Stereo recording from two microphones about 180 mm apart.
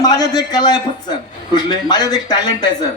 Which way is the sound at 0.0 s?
20° left (ahead or behind).